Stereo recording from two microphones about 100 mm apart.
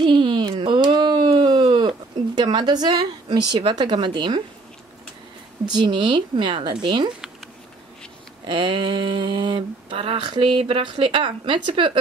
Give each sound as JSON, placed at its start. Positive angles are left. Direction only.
{"t": 0.0, "sound": "a sound", "side_deg": -55}
{"t": 2.3, "sound": "speech", "side_deg": -45}
{"t": 5.7, "sound": "speech", "side_deg": -50}
{"t": 8.5, "sound": "speech", "side_deg": -60}